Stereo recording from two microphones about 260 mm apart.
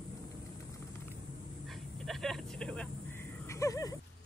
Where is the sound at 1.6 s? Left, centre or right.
Centre.